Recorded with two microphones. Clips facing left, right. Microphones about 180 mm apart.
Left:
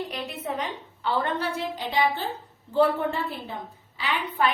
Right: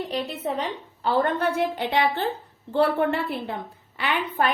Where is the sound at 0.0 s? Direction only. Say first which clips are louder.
Right 4 dB; 35° right (ahead or behind).